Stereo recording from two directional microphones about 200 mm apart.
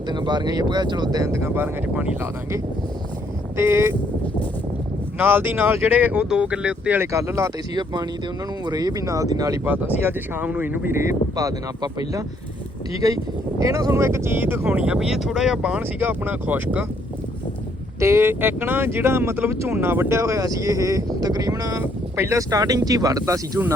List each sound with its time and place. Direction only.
0.1 s speech: 20° right (ahead or behind)
3.6 s speech: 15° right (ahead or behind)
5.1 s speech: 10° right (ahead or behind)
13.6 s speech: 15° right (ahead or behind)
18.0 s speech: 15° right (ahead or behind)